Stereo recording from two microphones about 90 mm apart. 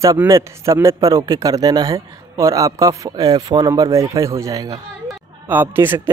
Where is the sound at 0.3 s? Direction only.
30° right (ahead or behind).